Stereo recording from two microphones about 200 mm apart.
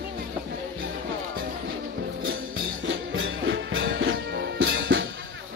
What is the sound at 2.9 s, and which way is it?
Music, 65° right (ahead or behind).